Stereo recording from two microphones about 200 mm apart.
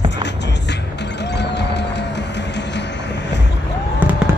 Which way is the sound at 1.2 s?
60° left (ahead or behind).